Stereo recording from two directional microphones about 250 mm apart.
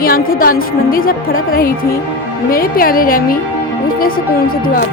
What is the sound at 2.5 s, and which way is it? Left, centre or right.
Speech, left.